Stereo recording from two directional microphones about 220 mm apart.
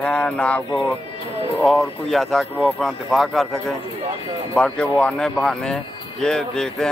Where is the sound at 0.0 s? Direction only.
5° left (ahead or behind).